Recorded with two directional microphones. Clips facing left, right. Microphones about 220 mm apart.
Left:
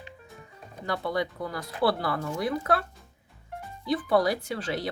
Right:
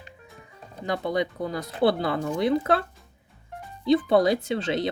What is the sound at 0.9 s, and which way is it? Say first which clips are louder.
Speech: right 3 dB; 20° right (ahead or behind).